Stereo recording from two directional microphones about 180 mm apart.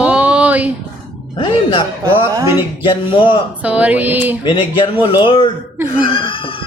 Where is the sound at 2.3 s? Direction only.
15° right (ahead or behind).